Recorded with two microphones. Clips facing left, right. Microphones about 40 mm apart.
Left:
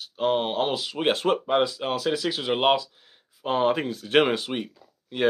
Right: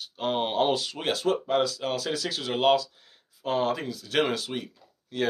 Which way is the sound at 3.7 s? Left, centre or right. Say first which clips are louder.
Left 5 dB; left.